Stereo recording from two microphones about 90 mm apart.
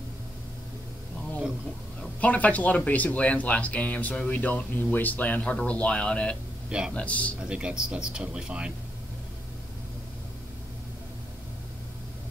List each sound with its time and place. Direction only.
2.1 s speech: 15° left (ahead or behind)
7.4 s speech: 10° right (ahead or behind)